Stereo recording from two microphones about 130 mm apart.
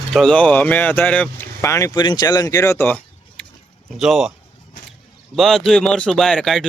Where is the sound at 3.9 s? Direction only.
Centre (ahead or behind).